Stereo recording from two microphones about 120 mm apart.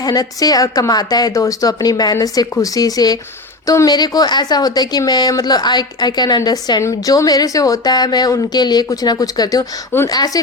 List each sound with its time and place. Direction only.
0.0 s speech: 30° left (ahead or behind)